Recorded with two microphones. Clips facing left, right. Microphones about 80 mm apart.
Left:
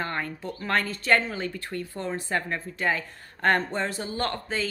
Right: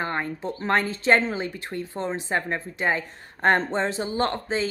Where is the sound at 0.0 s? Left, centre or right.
Right.